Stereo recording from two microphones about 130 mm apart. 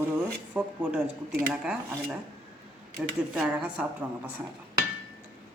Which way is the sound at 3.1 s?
5° right (ahead or behind).